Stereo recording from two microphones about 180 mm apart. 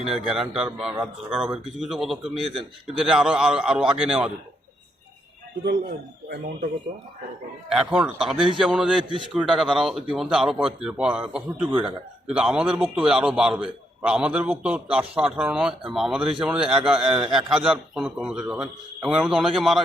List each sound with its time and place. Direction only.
0.1 s a man's voice: centre (ahead or behind)
6.2 s speech: 60° right (ahead or behind)
7.7 s a man's voice: 5° right (ahead or behind)